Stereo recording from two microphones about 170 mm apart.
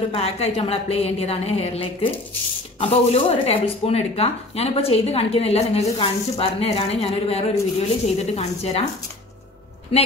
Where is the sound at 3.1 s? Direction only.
35° left (ahead or behind).